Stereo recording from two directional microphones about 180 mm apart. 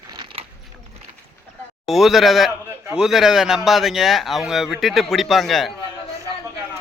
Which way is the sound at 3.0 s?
Centre (ahead or behind).